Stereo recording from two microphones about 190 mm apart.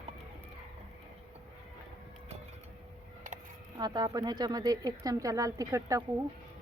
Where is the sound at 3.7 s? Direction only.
20° right (ahead or behind).